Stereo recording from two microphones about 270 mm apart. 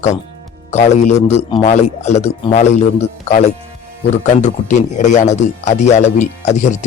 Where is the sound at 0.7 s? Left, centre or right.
Left.